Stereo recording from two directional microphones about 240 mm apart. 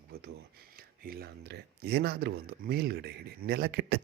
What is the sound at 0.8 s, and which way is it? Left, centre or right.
Speech, right.